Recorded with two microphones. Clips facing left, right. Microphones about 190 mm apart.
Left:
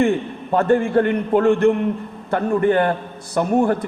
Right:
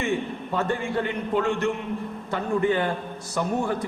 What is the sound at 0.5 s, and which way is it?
A man's voice, 55° left (ahead or behind).